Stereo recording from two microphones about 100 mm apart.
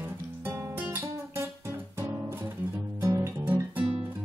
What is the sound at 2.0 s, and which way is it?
Music, 25° right (ahead or behind).